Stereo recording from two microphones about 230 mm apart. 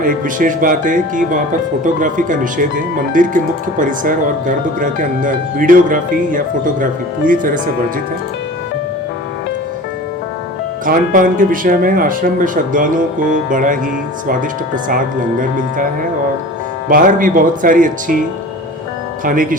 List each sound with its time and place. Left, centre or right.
0.0 s speech: right
10.8 s speech: right
14.8 s speech: right
16.9 s speech: right
19.2 s speech: right